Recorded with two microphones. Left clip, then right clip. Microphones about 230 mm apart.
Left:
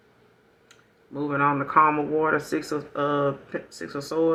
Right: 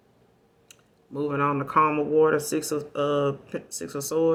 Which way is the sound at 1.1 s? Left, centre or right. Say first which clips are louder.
Left 2 dB; right.